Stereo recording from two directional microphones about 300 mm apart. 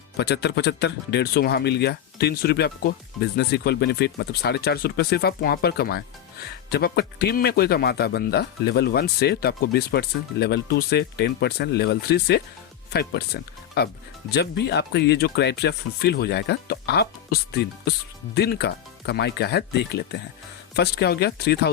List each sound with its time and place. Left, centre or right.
0.2 s speech: left